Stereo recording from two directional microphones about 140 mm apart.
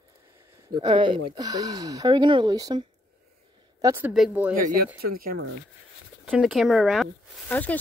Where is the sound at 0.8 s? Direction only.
35° right (ahead or behind).